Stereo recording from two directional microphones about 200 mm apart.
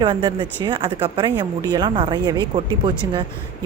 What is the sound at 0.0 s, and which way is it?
A woman's voice, 25° right (ahead or behind).